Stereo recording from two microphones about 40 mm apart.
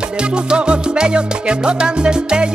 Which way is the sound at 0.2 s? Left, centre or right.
Right.